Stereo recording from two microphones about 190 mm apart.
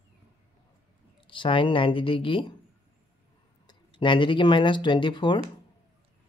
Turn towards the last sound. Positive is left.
turn(degrees=25)  # may be behind; listen again after turning